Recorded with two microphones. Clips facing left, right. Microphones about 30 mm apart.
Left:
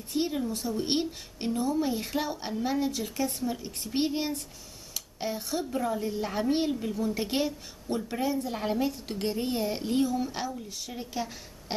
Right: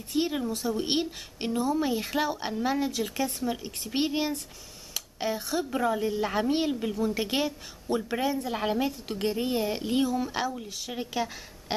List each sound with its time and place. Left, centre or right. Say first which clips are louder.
0.3 s a woman's voice: right 2 dB; centre
4.9 s a sound: right 3 dB; centre
5.7 s a woman's voice: right 4 dB; right
7.1 s a woman's voice: left 1 dB; centre; by 11.2 s right